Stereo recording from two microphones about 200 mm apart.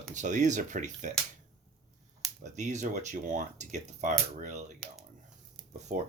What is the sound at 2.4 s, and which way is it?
Speech, 35° right (ahead or behind).